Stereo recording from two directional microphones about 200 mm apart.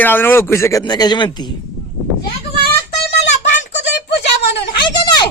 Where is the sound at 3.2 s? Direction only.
35° left (ahead or behind).